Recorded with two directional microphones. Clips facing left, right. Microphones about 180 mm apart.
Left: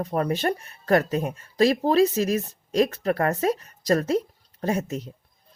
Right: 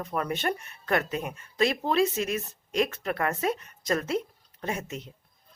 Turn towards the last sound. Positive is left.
turn(degrees=35)  # may be behind; listen again after turning